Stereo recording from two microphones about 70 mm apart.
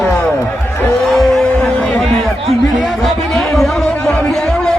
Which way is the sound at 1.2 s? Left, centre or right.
Centre.